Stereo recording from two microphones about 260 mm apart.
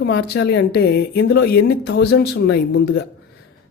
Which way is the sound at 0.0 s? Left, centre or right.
Left.